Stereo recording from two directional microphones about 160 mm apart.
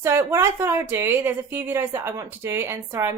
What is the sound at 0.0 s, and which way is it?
A woman's voice, 15° right (ahead or behind).